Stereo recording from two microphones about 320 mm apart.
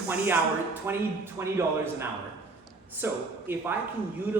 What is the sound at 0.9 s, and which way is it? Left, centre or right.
A man's voice, centre.